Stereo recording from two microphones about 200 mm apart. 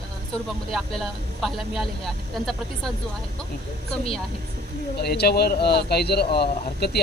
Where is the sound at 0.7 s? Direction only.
Centre (ahead or behind).